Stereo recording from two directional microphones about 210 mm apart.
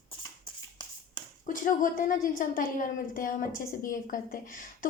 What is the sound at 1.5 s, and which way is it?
A woman's voice, 40° left (ahead or behind).